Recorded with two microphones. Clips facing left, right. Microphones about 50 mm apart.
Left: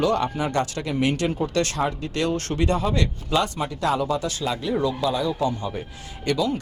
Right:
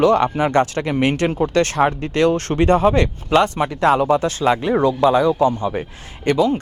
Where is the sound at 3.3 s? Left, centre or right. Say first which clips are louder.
Right 8 dB; right.